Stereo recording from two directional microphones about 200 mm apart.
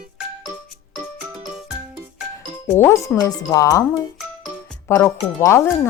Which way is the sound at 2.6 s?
10° left (ahead or behind).